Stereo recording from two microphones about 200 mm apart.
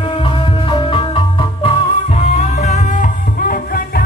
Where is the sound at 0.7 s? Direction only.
25° left (ahead or behind).